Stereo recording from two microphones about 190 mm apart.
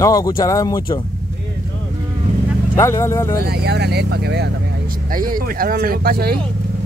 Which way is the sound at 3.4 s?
55° right (ahead or behind).